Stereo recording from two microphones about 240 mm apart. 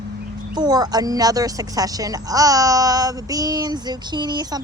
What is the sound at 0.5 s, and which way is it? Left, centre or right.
A woman's voice, centre.